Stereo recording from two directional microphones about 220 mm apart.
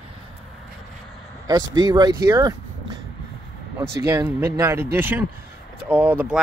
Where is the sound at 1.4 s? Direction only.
20° right (ahead or behind).